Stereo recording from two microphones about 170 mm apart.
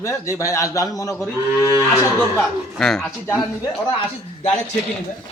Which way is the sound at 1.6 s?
15° right (ahead or behind).